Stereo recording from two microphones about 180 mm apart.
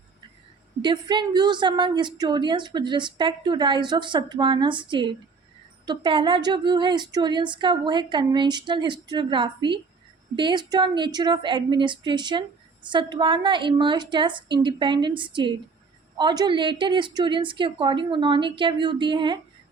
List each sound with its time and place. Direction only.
0.8 s a woman's voice: 25° right (ahead or behind)